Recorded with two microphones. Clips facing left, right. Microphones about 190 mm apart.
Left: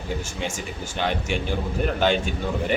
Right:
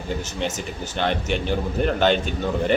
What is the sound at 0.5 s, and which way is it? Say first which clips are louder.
Speech: right 2 dB; 10° left (ahead or behind).